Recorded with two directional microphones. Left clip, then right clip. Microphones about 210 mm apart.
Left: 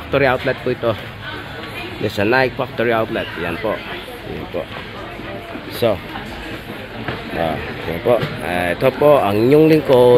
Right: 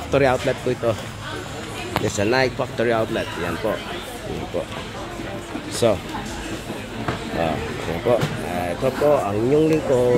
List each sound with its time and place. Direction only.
0.1 s speech: 5° left (ahead or behind)
2.1 s speech: 10° left (ahead or behind)
5.8 s speech: centre (ahead or behind)
8.1 s speech: 35° left (ahead or behind)